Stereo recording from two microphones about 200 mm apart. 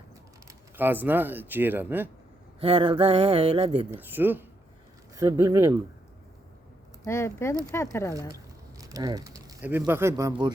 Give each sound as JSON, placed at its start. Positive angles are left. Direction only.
{"t": 0.4, "sound": "speech", "side_deg": -10}
{"t": 2.6, "sound": "a sound", "side_deg": -30}
{"t": 3.9, "sound": "speech", "side_deg": -10}
{"t": 7.0, "sound": "speech", "side_deg": 15}
{"t": 8.8, "sound": "speech", "side_deg": -20}